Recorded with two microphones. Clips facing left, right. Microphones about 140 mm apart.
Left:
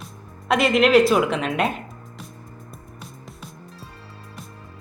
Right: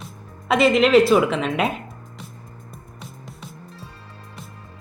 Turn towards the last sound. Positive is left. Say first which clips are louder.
# right 1 dB
turn(degrees=0)  # may be behind; listen again after turning